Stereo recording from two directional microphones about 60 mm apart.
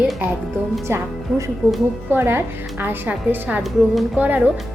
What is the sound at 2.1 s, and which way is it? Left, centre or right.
A woman's voice, right.